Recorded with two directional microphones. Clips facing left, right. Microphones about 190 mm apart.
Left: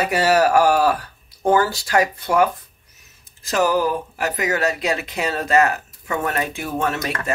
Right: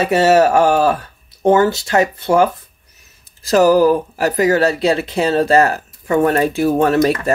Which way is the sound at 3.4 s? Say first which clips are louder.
Right 8 dB; 35° right (ahead or behind).